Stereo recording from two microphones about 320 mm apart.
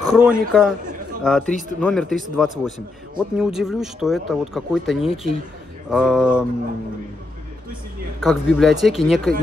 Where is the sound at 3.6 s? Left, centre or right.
Centre.